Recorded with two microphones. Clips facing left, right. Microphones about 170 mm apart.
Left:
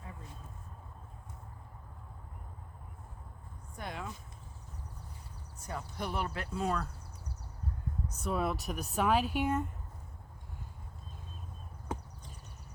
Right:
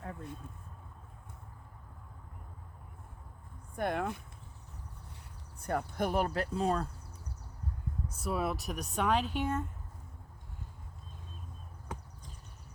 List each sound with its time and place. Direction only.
0.0 s a sound: 60° right (ahead or behind)
3.8 s speech: 55° right (ahead or behind)
5.5 s speech: 60° right (ahead or behind); by 6.8 s 35° right (ahead or behind)
8.1 s speech: 5° right (ahead or behind); by 9.6 s 10° left (ahead or behind)